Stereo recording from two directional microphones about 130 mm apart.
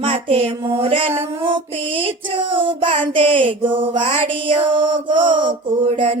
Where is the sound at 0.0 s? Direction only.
45° right (ahead or behind).